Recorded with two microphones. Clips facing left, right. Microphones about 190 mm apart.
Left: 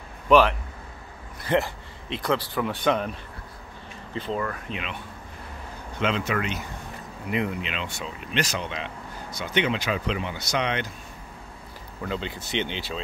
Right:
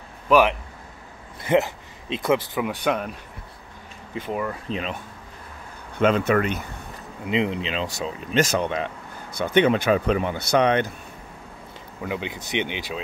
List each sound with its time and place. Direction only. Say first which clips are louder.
0.3 s speech: even; 15° right (ahead or behind)
4.1 s speech: right 1 dB; 15° right (ahead or behind)
4.6 s speech: right 5 dB; 35° right (ahead or behind)
5.9 s speech: right 7 dB; 50° right (ahead or behind)
7.2 s speech: right 4 dB; 20° right (ahead or behind); by 10.9 s 50° right (ahead or behind)
12.0 s speech: right 2 dB; 15° right (ahead or behind)